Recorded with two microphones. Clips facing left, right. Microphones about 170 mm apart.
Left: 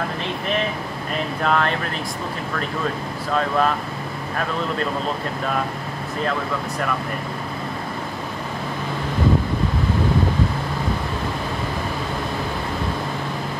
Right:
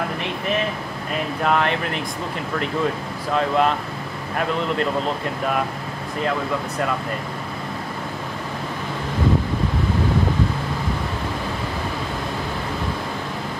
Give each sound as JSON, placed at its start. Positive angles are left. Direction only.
{"t": 1.4, "sound": "speech", "side_deg": -20}
{"t": 3.3, "sound": "speech", "side_deg": -20}